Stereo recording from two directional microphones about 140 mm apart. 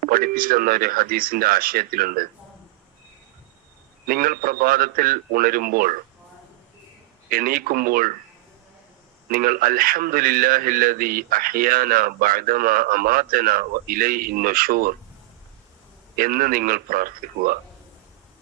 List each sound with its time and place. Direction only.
0.0 s a man's voice: 90° right
4.0 s a man's voice: 90° right
7.3 s a man's voice: 90° right
9.3 s a man's voice: 90° right
16.1 s a man's voice: 90° right